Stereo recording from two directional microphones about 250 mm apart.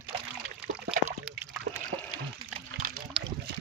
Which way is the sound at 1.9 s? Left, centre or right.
Right.